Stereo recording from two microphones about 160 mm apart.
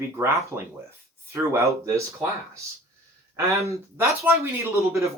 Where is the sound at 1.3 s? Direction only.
15° right (ahead or behind).